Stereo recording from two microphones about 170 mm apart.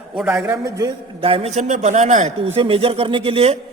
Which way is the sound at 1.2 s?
35° right (ahead or behind).